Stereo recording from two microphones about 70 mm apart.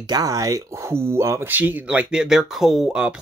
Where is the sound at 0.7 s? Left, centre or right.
Right.